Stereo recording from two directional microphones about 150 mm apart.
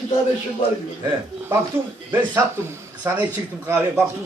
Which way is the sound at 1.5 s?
15° right (ahead or behind).